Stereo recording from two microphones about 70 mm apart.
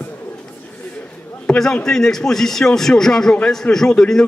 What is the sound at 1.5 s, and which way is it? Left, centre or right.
A man's voice, centre.